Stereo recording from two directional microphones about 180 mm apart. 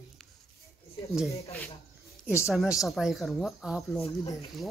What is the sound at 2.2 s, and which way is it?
Speech, 15° left (ahead or behind).